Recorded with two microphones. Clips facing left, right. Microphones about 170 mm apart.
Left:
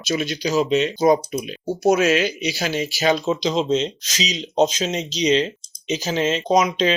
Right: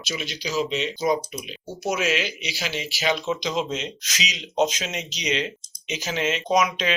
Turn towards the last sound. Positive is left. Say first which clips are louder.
# left 4 dB
turn(degrees=30)  # may be behind; listen again after turning